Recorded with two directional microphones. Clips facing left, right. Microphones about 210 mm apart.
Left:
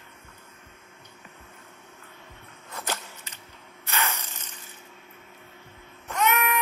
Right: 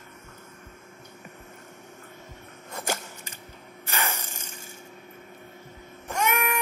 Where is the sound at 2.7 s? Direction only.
45° right (ahead or behind).